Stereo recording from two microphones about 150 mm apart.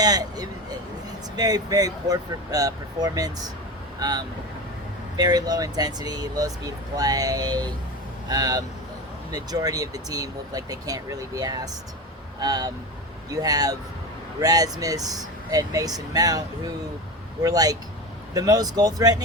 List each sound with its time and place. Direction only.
0.0 s speech: 25° right (ahead or behind)